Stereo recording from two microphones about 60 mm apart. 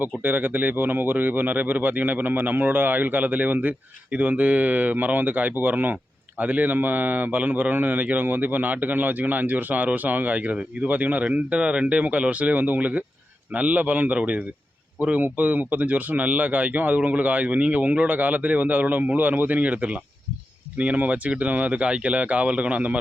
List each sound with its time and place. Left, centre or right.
0.0 s speech: right